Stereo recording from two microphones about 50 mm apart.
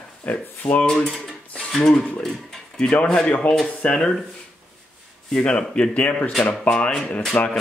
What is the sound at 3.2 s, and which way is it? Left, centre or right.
Speech, left.